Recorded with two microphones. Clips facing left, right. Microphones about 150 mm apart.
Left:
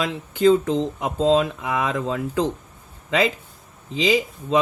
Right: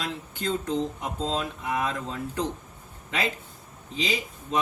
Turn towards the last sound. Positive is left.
turn(degrees=90)